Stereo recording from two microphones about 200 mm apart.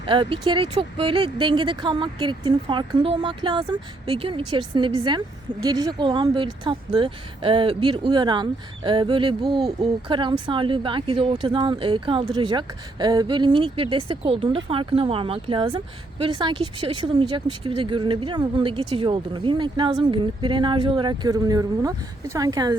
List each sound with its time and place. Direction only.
0.0 s speech: 25° right (ahead or behind)